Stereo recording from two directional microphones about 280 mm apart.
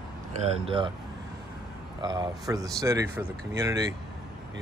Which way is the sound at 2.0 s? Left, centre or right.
Centre.